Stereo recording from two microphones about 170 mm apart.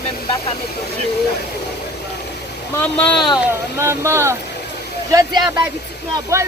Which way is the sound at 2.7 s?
10° left (ahead or behind).